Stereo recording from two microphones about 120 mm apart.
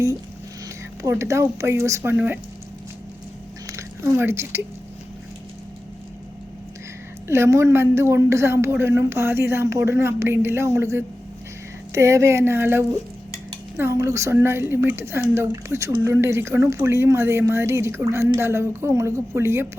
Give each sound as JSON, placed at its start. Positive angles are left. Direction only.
{"t": 1.2, "sound": "speech", "side_deg": -25}
{"t": 3.7, "sound": "speech", "side_deg": -20}
{"t": 7.3, "sound": "speech", "side_deg": -20}